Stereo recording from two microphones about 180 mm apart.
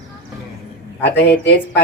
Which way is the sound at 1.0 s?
75° left (ahead or behind).